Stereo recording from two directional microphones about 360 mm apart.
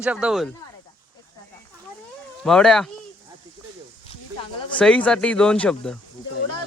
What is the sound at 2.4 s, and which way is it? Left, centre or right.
Speech, centre.